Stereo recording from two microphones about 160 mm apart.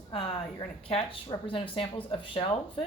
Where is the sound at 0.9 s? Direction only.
35° left (ahead or behind).